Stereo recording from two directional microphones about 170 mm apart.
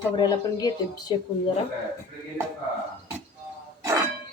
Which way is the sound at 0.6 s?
25° left (ahead or behind).